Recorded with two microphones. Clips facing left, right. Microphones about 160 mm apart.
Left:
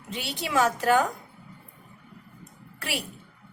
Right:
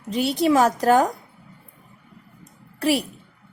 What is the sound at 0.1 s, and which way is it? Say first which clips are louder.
A woman's voice: right 11 dB; 40° right (ahead or behind).